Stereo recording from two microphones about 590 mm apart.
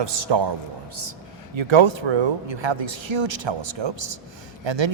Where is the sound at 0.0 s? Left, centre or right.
Right.